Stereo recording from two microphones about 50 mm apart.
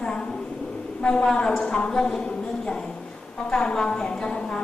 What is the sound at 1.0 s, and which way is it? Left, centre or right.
A woman's voice, left.